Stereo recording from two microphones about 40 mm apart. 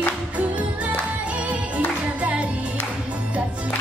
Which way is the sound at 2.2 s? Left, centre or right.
Right.